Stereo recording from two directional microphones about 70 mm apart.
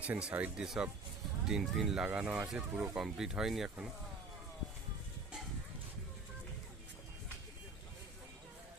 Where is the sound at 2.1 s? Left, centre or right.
Centre.